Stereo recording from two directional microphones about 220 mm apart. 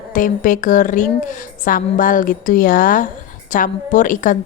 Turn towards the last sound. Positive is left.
turn(degrees=35)  # may be behind; listen again after turning